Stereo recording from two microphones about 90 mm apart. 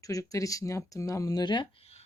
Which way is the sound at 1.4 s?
60° left (ahead or behind).